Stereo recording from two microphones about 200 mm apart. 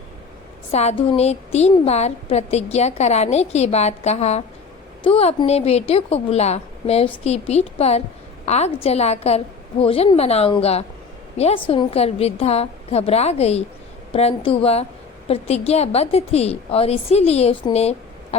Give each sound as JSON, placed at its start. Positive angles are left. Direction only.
{"t": 0.7, "sound": "a woman's voice", "side_deg": 35}